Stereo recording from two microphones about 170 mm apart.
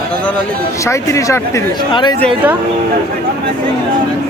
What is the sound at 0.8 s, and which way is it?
Speech, 20° left (ahead or behind).